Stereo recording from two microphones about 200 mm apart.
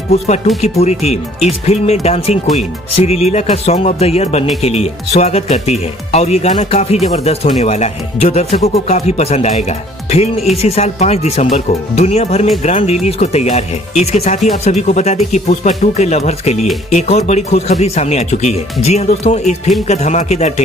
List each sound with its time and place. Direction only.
0.7 s speech: 30° left (ahead or behind)